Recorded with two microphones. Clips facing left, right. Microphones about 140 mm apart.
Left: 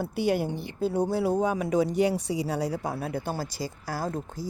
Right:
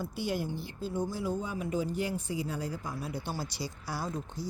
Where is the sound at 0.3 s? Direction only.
65° left (ahead or behind); by 4.2 s 45° left (ahead or behind).